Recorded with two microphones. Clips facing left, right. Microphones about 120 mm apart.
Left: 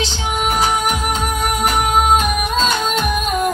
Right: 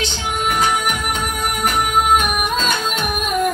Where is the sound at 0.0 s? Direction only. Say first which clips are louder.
Left 1 dB; 35° left (ahead or behind).